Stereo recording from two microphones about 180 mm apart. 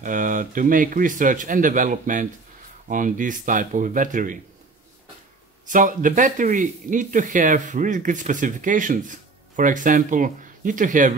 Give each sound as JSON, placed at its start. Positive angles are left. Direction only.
{"t": 0.0, "sound": "speech", "side_deg": -45}
{"t": 5.7, "sound": "speech", "side_deg": -45}